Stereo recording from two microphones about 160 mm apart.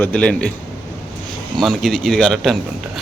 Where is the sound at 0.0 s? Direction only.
5° left (ahead or behind).